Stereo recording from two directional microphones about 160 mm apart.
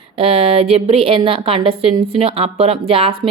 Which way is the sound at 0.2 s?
35° right (ahead or behind).